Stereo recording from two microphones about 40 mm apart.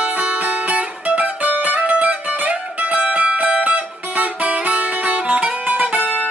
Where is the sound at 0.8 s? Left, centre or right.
Right.